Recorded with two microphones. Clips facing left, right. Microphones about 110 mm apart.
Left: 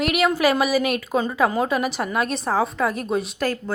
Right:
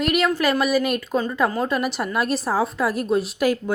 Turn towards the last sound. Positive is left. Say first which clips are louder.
# right 3 dB
turn(degrees=0)  # may be behind; listen again after turning